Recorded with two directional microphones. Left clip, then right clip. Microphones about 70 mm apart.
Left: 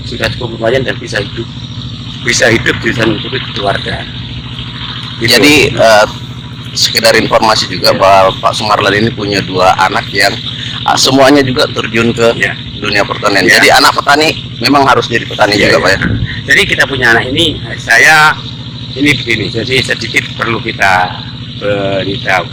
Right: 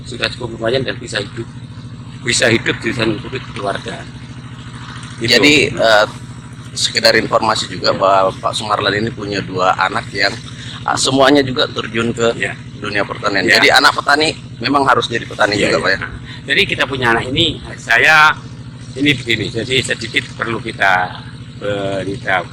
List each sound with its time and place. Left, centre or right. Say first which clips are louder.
0.2 s speech: left 5 dB; right
2.2 s speech: left 5 dB; right
3.3 s speech: left 8 dB; centre
5.3 s a man's voice: left 4 dB; left; by 9.7 s centre
9.7 s a man's voice: left 7 dB; left
11.7 s speech: left 7 dB; centre
12.1 s a man's voice: left 6 dB; left
14.7 s speech: left 5 dB; centre
15.7 s a man's voice: left 7 dB; left
16.5 s speech: left 6 dB; right
17.8 s speech: left 4 dB; centre
18.9 s speech: left 5 dB; right